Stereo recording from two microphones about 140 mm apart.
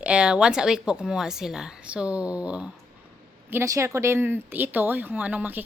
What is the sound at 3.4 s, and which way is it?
Speech, 20° right (ahead or behind).